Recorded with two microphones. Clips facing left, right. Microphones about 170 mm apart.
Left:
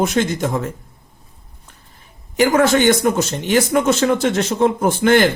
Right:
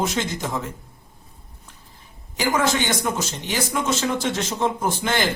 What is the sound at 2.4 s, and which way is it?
Speech, 55° left (ahead or behind).